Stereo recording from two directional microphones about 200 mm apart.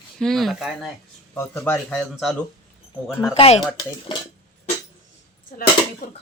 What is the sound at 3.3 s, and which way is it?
Speech, 30° left (ahead or behind).